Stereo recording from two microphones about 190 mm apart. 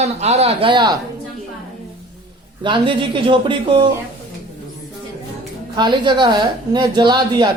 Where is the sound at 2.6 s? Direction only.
25° right (ahead or behind).